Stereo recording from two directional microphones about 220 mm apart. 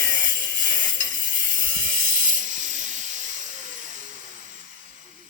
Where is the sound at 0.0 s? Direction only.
40° right (ahead or behind).